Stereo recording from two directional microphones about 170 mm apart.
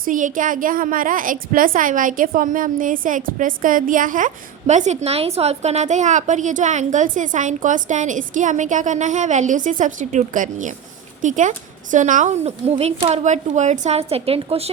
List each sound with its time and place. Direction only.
0.0 s a woman's voice: 50° right (ahead or behind)